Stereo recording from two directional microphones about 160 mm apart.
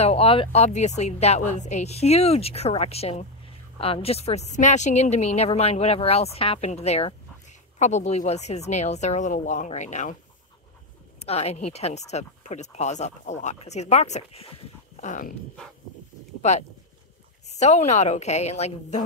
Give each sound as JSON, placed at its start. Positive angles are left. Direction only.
{"t": 0.0, "sound": "a woman's voice", "side_deg": 35}
{"t": 11.1, "sound": "speech", "side_deg": 40}
{"t": 16.3, "sound": "a sound", "side_deg": 45}
{"t": 17.5, "sound": "speech", "side_deg": 45}